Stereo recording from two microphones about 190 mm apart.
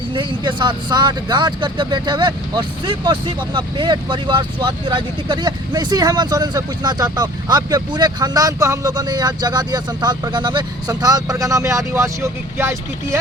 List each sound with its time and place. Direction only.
0.1 s speech: 25° right (ahead or behind)